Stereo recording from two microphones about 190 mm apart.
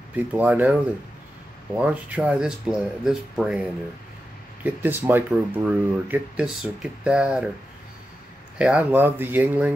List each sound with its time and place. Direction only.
0.1 s speech: 10° right (ahead or behind)
1.8 s speech: 10° right (ahead or behind)
4.6 s speech: 10° right (ahead or behind)
8.5 s speech: 5° right (ahead or behind)